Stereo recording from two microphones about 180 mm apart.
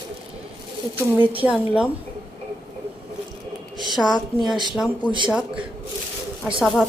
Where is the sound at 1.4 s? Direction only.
5° right (ahead or behind).